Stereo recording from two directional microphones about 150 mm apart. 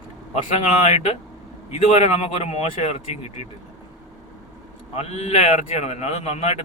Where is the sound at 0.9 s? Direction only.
50° left (ahead or behind).